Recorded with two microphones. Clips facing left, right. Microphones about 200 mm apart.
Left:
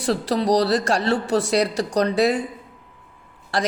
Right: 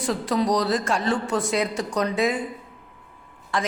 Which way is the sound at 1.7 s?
75° left (ahead or behind).